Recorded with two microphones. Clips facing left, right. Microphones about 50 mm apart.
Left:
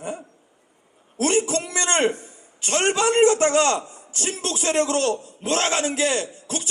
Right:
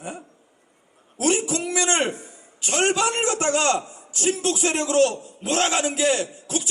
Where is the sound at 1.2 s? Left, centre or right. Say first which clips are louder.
Left 1 dB; left.